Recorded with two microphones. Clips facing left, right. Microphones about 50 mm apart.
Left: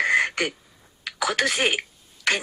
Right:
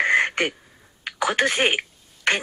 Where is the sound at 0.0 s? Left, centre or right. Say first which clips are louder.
Right 1 dB; right.